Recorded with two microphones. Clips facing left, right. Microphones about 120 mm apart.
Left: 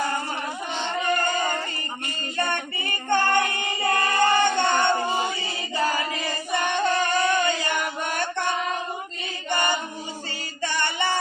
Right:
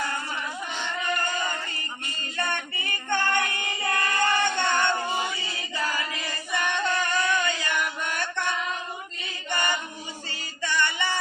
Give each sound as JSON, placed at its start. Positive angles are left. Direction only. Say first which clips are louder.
{"t": 1.2, "sound": "music", "louder": "left 5 dB", "side_deg": 45}
{"t": 2.4, "sound": "child singing", "louder": "left 3 dB", "side_deg": 30}
{"t": 9.5, "sound": "choir", "louder": "left 3 dB", "side_deg": 30}
{"t": 10.6, "sound": "music", "louder": "left 1 dB", "side_deg": 35}